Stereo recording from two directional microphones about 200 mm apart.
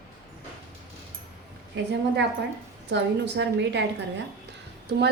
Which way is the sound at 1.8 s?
60° right (ahead or behind).